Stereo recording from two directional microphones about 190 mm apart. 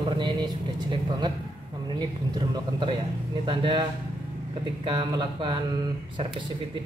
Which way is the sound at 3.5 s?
25° right (ahead or behind).